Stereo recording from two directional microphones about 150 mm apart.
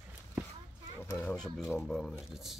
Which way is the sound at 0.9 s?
15° left (ahead or behind).